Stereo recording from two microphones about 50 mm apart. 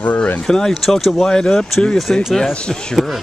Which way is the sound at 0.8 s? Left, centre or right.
Centre.